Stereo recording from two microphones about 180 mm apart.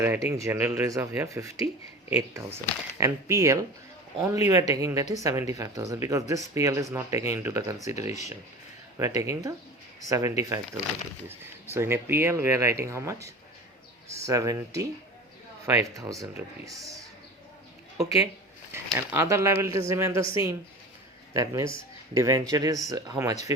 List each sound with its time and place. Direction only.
0.0 s speech: 10° right (ahead or behind)
11.7 s speech: 15° right (ahead or behind)
18.7 s speech: 15° right (ahead or behind)